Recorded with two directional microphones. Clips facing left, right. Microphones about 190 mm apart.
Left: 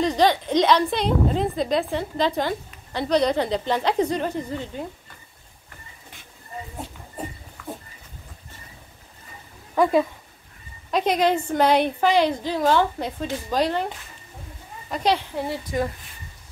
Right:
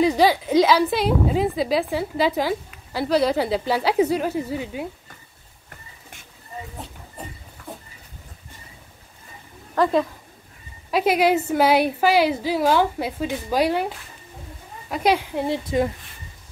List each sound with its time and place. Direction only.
0.0 s a woman's voice: 5° right (ahead or behind)
9.8 s a woman's voice: 5° left (ahead or behind)
10.9 s a woman's voice: 5° right (ahead or behind)
15.4 s speech: 20° right (ahead or behind)